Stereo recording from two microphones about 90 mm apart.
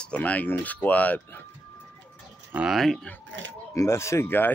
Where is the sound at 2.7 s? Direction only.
Centre (ahead or behind).